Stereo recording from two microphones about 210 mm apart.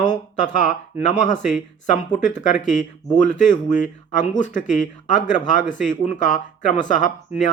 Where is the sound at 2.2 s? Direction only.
35° left (ahead or behind).